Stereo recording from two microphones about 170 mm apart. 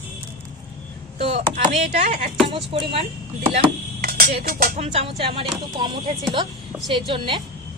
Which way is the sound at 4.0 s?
60° right (ahead or behind).